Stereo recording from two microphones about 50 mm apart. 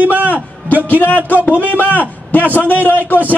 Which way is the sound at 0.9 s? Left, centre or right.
Left.